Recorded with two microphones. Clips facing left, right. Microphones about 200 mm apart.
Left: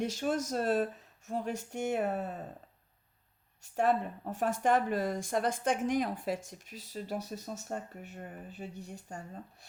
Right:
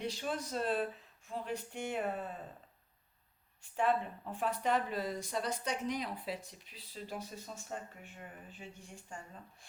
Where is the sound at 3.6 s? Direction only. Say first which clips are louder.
Left 3 dB; 45° left (ahead or behind).